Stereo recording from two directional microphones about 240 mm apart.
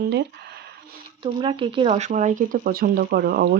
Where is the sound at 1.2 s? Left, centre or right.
Right.